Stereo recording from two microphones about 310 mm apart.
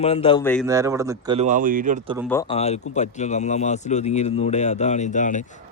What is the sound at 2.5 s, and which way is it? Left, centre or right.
A man's voice, left.